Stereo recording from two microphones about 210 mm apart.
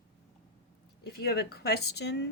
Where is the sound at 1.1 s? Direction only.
50° left (ahead or behind).